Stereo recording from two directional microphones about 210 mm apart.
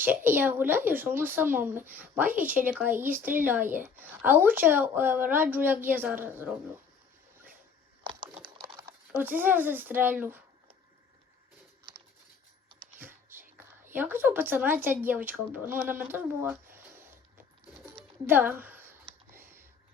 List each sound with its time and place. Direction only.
0.0 s speech: 10° right (ahead or behind)
8.7 s speech: 10° right (ahead or behind)
13.0 s a sound: 10° right (ahead or behind)
13.8 s speech: 10° right (ahead or behind)
18.3 s speech: 10° right (ahead or behind)
18.6 s a sound: 10° right (ahead or behind)